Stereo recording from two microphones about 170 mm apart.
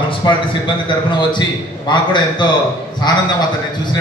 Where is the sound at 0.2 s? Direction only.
25° left (ahead or behind).